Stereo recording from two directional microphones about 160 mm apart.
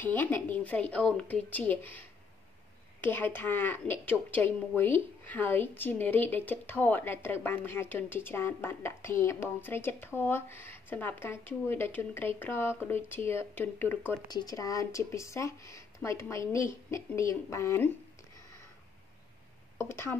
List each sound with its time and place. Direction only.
0.0 s a woman's voice: 10° left (ahead or behind)
14.2 s speech: 25° left (ahead or behind)
19.8 s a woman's voice: 15° left (ahead or behind)